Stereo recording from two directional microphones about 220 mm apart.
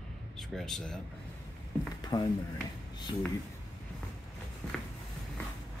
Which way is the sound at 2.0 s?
15° left (ahead or behind).